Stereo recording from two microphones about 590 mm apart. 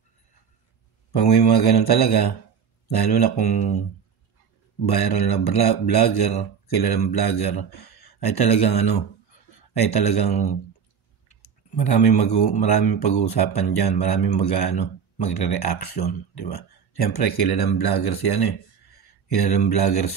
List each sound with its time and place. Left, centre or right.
1.1 s speech: left
4.8 s speech: left
11.4 s speech: left